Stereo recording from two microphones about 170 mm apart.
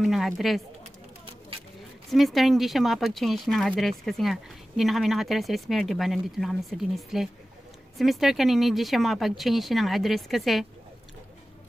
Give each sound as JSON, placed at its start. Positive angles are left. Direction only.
{"t": 0.0, "sound": "speech", "side_deg": 0}
{"t": 2.0, "sound": "speech", "side_deg": 0}